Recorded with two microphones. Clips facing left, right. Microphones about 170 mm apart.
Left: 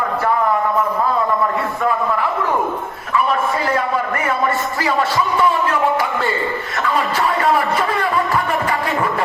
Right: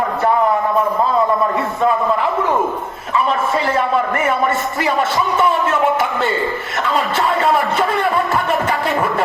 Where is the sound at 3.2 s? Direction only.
25° right (ahead or behind).